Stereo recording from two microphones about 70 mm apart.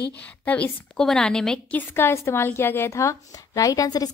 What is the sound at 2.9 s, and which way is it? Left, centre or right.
Speech, left.